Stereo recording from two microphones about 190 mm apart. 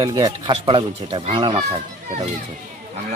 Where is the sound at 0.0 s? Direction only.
20° right (ahead or behind).